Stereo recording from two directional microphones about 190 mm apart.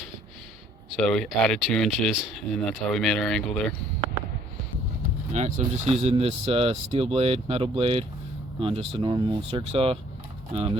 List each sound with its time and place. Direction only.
0.9 s speech: 5° left (ahead or behind)
5.3 s speech: 40° right (ahead or behind)